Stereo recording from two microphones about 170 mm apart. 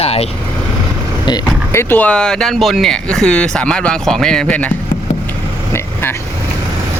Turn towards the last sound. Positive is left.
turn(degrees=15)  # may be behind; listen again after turning